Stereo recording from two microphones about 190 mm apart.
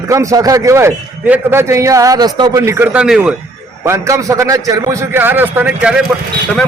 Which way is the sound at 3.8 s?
15° right (ahead or behind).